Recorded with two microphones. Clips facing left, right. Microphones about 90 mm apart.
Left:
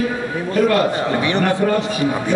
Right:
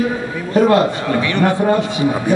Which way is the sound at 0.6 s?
25° right (ahead or behind).